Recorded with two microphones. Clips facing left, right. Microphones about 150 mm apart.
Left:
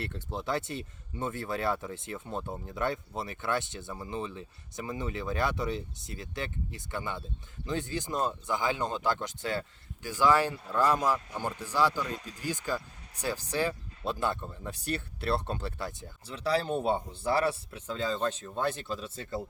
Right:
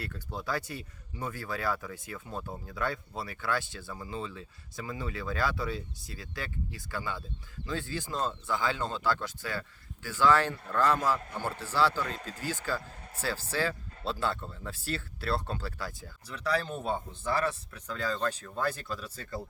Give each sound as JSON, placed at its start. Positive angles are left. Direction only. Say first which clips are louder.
{"t": 0.0, "sound": "speech", "louder": "left 2 dB", "side_deg": 25}